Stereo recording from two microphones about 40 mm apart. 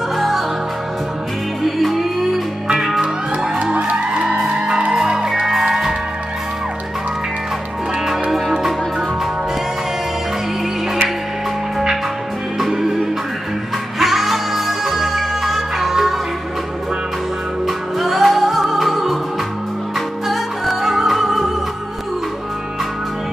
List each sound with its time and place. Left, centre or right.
1.8 s music: centre
4.1 s music: right; by 5.9 s centre
12.5 s music: centre
17.6 s music: centre
20.2 s music: centre